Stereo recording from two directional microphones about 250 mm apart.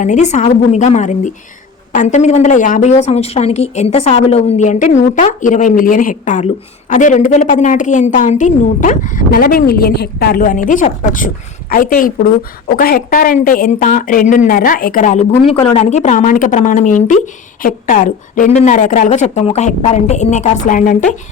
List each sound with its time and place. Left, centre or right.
0.0 s a woman's voice: left